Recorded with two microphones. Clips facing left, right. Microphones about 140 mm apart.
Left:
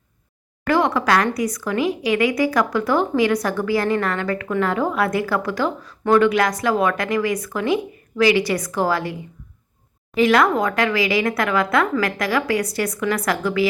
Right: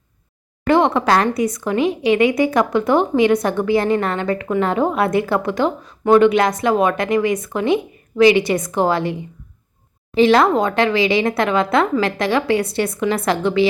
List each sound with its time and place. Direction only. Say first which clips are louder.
0.7 s speech: right 3 dB; 25° right (ahead or behind)
10.2 s speech: right 3 dB; 30° right (ahead or behind)